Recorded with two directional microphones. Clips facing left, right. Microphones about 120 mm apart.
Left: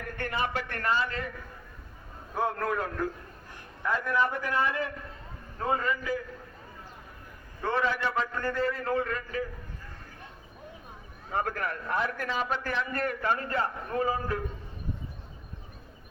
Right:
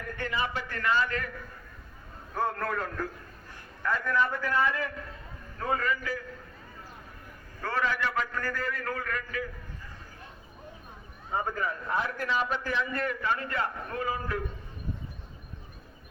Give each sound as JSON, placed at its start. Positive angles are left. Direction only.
{"t": 0.2, "sound": "a man's voice", "side_deg": 55}
{"t": 0.9, "sound": "a man's voice", "side_deg": 30}
{"t": 2.3, "sound": "a man's voice", "side_deg": 10}
{"t": 3.8, "sound": "a man's voice", "side_deg": 15}
{"t": 7.6, "sound": "a man's voice", "side_deg": 25}
{"t": 11.3, "sound": "a man's voice", "side_deg": 80}
{"t": 12.0, "sound": "a man's voice", "side_deg": 50}